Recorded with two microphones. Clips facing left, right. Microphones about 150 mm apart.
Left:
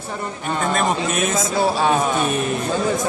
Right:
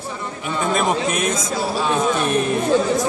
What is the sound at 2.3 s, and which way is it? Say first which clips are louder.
Speech: right 2 dB; centre (ahead or behind).